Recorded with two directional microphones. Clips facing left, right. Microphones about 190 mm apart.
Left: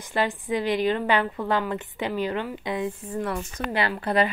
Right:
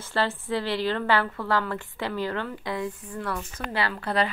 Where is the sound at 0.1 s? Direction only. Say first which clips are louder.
Left 1 dB; 15° left (ahead or behind).